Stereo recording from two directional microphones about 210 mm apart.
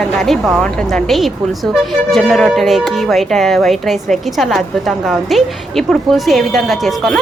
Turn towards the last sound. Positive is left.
turn(degrees=0)  # may be behind; listen again after turning